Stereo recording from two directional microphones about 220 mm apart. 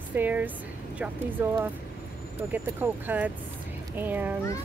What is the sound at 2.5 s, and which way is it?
A woman's voice, 10° right (ahead or behind).